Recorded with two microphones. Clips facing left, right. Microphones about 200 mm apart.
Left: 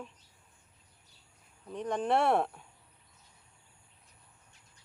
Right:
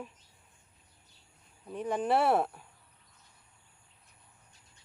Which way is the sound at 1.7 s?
5° right (ahead or behind).